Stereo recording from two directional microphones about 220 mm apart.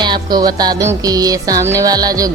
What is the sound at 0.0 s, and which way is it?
Music, 20° right (ahead or behind).